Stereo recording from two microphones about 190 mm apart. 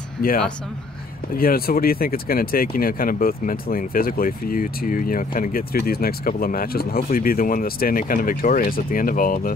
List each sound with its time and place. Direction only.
1.3 s speech: 50° left (ahead or behind)